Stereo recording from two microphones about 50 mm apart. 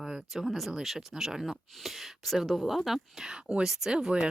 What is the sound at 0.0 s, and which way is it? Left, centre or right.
Speech, centre.